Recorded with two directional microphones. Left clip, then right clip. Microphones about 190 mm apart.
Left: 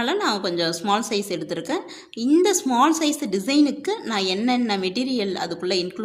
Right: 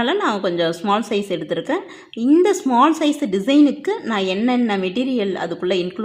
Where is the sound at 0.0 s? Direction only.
25° right (ahead or behind).